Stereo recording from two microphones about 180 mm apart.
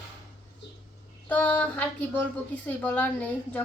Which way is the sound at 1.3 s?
10° left (ahead or behind).